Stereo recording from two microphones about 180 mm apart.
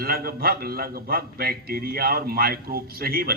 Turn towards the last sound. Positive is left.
turn(degrees=-60)  # may be behind; listen again after turning